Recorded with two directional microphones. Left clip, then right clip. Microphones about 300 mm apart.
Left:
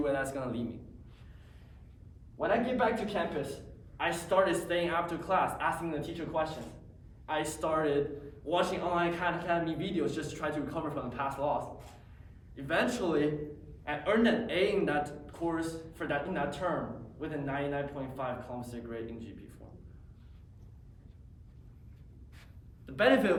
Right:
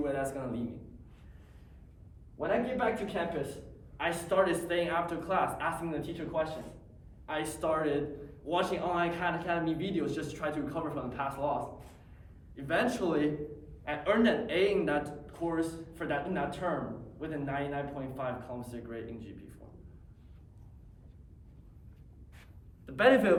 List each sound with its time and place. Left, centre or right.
0.0 s a man's voice: centre
2.4 s speech: centre
22.9 s speech: centre